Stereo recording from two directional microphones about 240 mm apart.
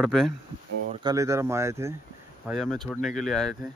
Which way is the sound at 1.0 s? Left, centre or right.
Centre.